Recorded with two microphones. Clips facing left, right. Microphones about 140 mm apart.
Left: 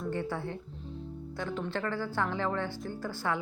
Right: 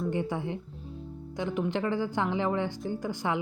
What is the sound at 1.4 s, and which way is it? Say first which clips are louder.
Speech: right 5 dB; 15° right (ahead or behind).